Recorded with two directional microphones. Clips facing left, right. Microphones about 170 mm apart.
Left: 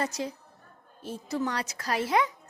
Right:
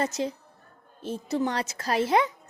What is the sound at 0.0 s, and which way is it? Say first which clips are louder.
A woman's voice: right 4 dB; 25° right (ahead or behind).